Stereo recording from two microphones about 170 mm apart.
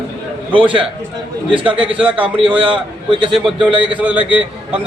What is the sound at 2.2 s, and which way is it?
A man's voice, 30° right (ahead or behind).